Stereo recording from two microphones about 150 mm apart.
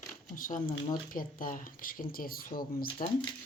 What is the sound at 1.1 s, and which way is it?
Speech, 65° left (ahead or behind).